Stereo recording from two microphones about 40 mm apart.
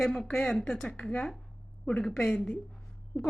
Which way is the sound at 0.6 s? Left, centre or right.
Left.